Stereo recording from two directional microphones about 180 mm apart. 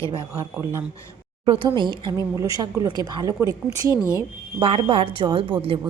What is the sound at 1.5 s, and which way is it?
Speech, 25° right (ahead or behind).